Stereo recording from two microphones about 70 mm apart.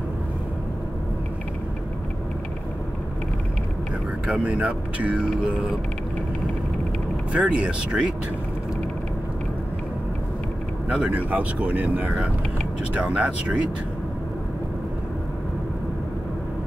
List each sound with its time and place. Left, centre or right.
4.3 s speech: centre
7.3 s speech: centre
10.9 s speech: centre